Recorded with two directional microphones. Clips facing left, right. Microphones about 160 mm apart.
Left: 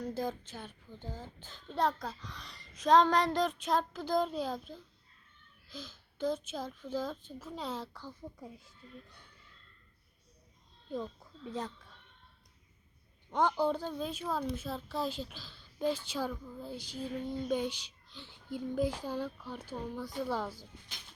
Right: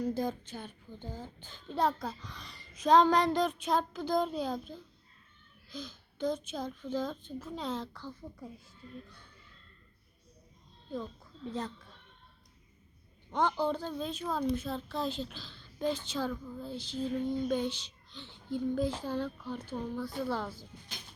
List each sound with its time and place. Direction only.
0.0 s a child's voice: centre (ahead or behind); by 9.2 s 20° left (ahead or behind)
10.9 s speech: 15° left (ahead or behind)
13.3 s a woman's voice: 10° left (ahead or behind)